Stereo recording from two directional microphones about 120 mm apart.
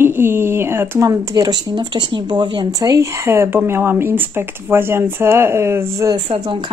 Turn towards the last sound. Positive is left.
turn(degrees=-45)  # may be behind; listen again after turning